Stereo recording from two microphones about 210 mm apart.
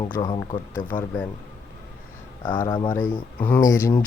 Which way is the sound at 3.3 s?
5° left (ahead or behind).